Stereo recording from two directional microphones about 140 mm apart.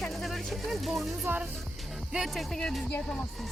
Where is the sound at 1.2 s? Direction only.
10° right (ahead or behind).